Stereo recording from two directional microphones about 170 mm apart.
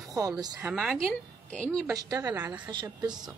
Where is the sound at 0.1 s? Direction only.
20° right (ahead or behind).